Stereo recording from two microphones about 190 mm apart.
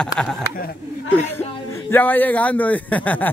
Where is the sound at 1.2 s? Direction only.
10° left (ahead or behind).